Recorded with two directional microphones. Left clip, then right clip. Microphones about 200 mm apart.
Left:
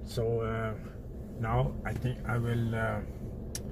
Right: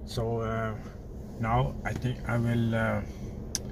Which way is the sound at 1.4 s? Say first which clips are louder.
Right 4 dB; 20° right (ahead or behind).